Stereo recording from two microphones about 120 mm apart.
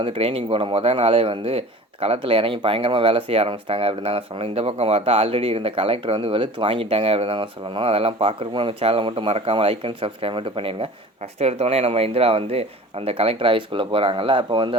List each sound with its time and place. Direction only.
0.0 s speech: 50° right (ahead or behind)
11.3 s speech: 60° right (ahead or behind); by 14.8 s 45° right (ahead or behind)